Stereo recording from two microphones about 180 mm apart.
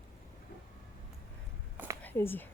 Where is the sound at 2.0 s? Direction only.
10° left (ahead or behind).